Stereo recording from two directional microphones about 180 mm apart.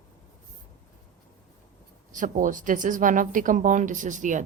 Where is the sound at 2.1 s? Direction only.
45° right (ahead or behind).